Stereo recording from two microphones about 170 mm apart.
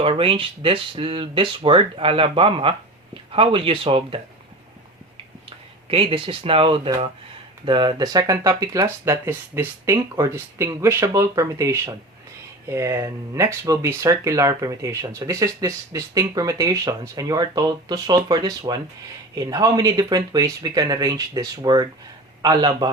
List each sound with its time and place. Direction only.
0.0 s speech: 30° right (ahead or behind)
5.5 s speech: 30° right (ahead or behind)